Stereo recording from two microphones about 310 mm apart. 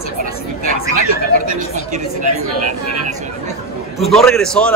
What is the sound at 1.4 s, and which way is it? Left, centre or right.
Speech, right.